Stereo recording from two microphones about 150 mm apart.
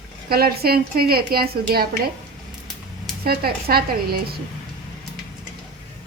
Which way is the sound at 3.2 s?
90° right.